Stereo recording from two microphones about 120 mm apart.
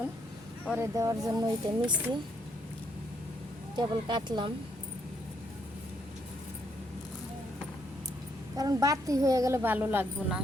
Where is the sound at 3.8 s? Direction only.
40° right (ahead or behind).